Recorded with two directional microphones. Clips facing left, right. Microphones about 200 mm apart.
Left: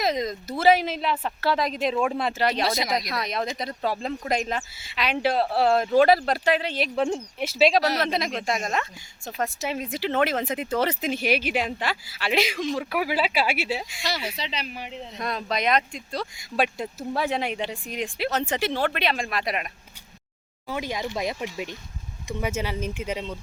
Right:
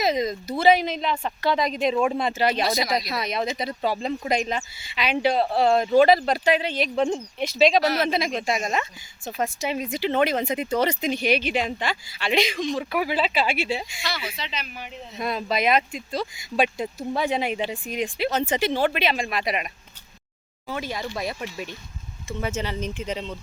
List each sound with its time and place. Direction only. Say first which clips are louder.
0.0 s speech: right 2 dB; centre (ahead or behind)
2.6 s speech: right 1 dB; 25° left (ahead or behind)
2.9 s speech: right 1 dB; centre (ahead or behind)
14.0 s speech: left 2 dB; 40° left (ahead or behind)
15.1 s speech: right 3 dB; 5° right (ahead or behind)
20.7 s speech: left 1 dB; 15° left (ahead or behind)